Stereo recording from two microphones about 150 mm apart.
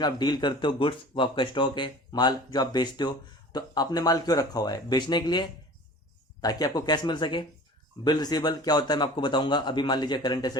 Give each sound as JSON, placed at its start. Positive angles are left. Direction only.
{"t": 0.0, "sound": "speech", "side_deg": 30}